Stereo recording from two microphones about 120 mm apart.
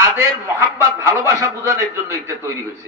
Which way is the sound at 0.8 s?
25° right (ahead or behind).